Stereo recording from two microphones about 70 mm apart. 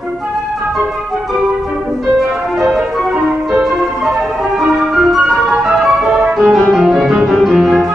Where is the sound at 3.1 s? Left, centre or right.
Centre.